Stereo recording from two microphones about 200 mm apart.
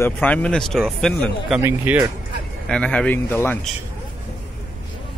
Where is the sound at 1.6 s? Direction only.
10° right (ahead or behind).